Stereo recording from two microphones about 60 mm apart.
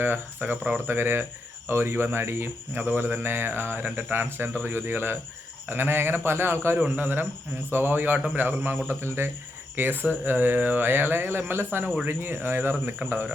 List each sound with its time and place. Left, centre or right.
0.0 s speech: right
9.0 s speech: right